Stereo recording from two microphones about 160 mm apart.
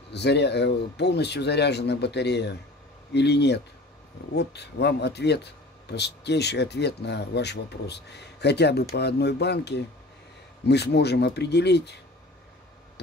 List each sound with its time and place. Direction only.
0.1 s speech: 90° left